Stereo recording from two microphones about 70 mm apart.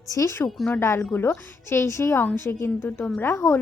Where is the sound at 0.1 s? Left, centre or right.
Left.